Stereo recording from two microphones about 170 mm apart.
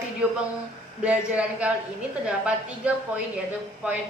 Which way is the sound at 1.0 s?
5° right (ahead or behind).